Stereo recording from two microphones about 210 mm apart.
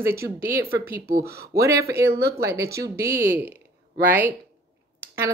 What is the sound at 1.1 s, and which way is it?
Speech, 50° right (ahead or behind).